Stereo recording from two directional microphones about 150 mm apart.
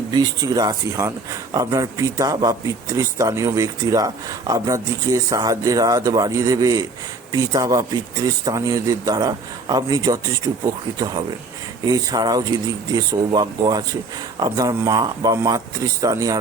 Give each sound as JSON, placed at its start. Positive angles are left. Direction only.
{"t": 0.1, "sound": "speech", "side_deg": -25}